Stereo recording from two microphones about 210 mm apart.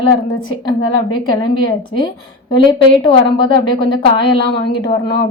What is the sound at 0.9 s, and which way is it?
Speech, 80° left.